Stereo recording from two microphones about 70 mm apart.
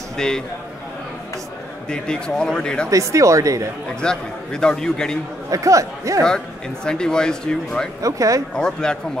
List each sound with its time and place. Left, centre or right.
0.2 s speech: centre
1.9 s speech: centre
2.9 s speech: right
4.0 s speech: centre
5.5 s speech: right
6.2 s speech: centre
8.0 s speech: right
8.5 s speech: centre